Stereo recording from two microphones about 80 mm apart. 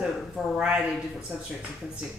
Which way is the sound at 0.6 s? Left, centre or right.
Centre.